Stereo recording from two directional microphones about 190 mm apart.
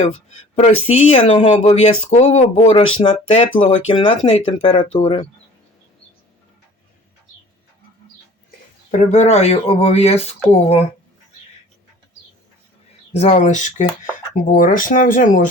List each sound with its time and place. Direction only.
0.0 s speech: 40° left (ahead or behind)
3.5 s speech: 45° left (ahead or behind)
3.8 s speech: 30° left (ahead or behind)
8.9 s speech: 40° left (ahead or behind)
13.1 s speech: 35° left (ahead or behind)